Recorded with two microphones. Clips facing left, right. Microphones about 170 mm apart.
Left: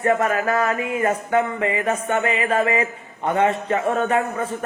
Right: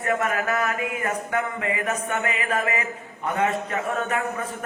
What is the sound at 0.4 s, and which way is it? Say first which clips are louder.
A man's voice: left 4 dB; 30° left (ahead or behind).